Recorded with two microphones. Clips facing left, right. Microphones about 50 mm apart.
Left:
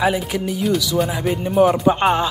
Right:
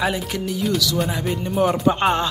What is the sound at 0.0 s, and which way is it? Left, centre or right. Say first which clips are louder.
Speech: left 4 dB; centre.